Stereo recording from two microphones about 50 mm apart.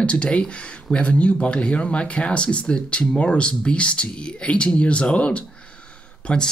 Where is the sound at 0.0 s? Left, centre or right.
Left.